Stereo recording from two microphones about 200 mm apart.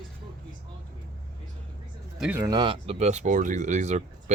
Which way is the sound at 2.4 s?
20° right (ahead or behind).